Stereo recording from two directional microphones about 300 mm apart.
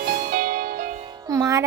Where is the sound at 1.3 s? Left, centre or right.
Centre.